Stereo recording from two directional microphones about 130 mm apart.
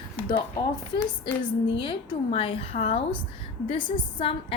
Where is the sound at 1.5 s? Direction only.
40° left (ahead or behind).